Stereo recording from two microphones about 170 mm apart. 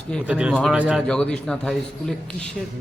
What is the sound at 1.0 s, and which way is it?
A man's voice, 5° left (ahead or behind).